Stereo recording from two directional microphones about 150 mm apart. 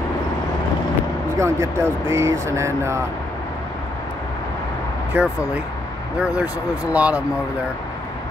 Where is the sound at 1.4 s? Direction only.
20° right (ahead or behind).